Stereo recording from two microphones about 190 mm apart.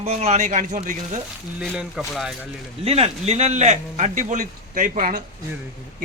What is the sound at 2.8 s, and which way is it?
A man's voice, 30° right (ahead or behind).